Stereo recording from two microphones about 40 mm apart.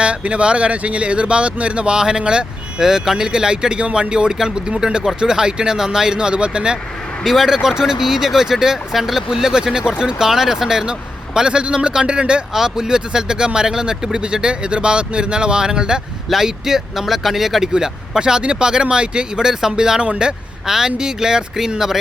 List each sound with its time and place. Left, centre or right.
0.0 s speech: right
7.3 s speech: centre; by 12.4 s right
12.5 s speech: centre